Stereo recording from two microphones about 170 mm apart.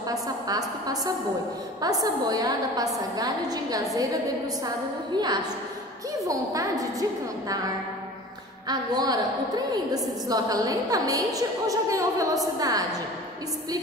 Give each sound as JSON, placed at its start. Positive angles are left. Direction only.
{"t": 0.1, "sound": "a woman's voice", "side_deg": -20}